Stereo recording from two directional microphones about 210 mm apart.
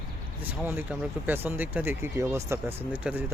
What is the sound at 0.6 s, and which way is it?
Speech, 5° right (ahead or behind).